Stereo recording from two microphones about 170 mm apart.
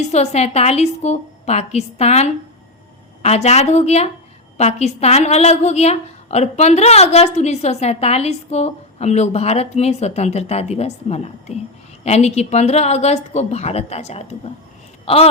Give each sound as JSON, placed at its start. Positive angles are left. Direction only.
{"t": 0.0, "sound": "a woman's voice", "side_deg": 40}